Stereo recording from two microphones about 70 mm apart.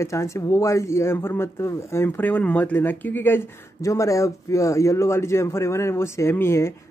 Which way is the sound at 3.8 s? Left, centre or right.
Left.